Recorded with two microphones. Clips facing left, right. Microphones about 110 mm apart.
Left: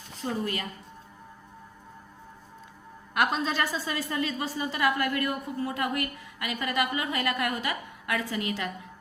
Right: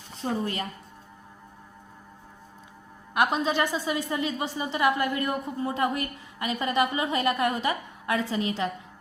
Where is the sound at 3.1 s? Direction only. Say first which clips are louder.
Right 2 dB; 20° right (ahead or behind).